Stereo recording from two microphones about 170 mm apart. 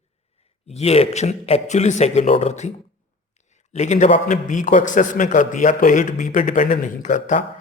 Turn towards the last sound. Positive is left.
turn(degrees=50)  # may be behind; listen again after turning